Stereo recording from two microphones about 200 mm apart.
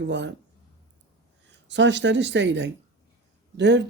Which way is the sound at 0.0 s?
60° right (ahead or behind).